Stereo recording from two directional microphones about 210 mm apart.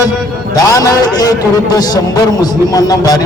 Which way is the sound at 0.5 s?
20° left (ahead or behind).